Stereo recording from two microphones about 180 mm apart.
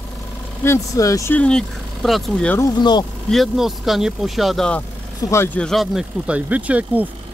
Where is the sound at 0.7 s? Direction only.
20° left (ahead or behind).